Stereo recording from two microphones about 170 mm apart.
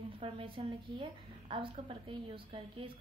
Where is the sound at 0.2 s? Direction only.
30° right (ahead or behind).